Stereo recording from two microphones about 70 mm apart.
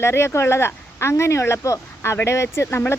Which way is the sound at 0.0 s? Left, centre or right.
Left.